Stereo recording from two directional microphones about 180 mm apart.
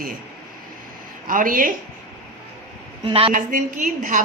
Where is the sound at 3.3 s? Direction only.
50° right (ahead or behind).